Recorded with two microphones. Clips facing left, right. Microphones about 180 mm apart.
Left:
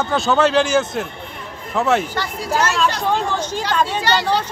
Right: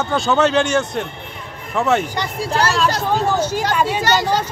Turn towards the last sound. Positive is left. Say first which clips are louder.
# right 1 dB
turn(degrees=-45)  # may be behind; listen again after turning